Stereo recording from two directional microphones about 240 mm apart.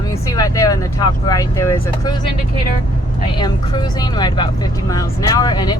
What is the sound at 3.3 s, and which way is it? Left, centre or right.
Speech, centre.